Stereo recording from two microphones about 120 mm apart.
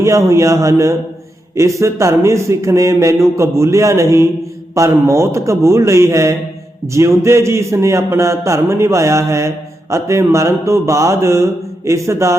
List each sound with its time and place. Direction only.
0.0 s speech: 25° right (ahead or behind)